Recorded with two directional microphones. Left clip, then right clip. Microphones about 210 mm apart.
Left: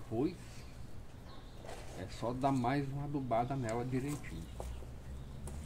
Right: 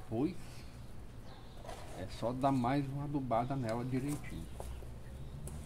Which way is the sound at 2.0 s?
25° right (ahead or behind).